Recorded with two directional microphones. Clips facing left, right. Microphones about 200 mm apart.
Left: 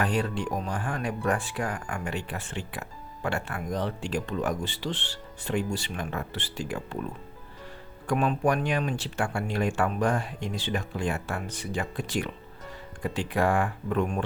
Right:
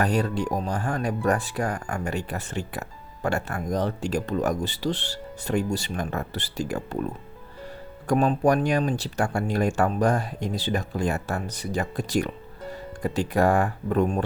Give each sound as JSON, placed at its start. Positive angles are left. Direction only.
{"t": 0.0, "sound": "speech", "side_deg": -40}
{"t": 8.0, "sound": "speech", "side_deg": -40}